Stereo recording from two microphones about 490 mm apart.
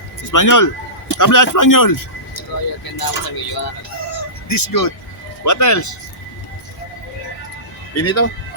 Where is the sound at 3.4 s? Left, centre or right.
Left.